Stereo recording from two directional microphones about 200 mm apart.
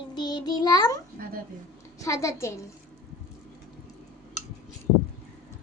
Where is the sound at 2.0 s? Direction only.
15° left (ahead or behind).